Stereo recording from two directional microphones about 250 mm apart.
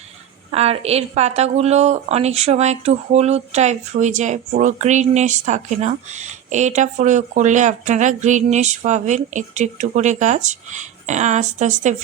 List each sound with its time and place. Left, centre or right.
0.5 s speech: right